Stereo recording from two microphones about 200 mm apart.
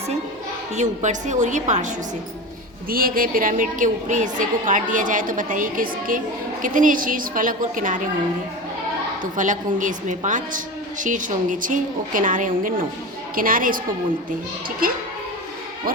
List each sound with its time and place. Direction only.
0.8 s a woman's voice: 35° right (ahead or behind)
2.9 s a woman's voice: 45° right (ahead or behind)
9.3 s a woman's voice: 40° right (ahead or behind)